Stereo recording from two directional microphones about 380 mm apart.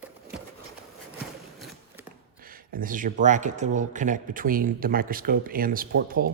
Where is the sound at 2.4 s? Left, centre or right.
Right.